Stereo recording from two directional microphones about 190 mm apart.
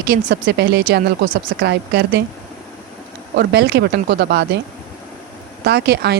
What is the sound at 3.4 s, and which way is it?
Speech, 60° right (ahead or behind).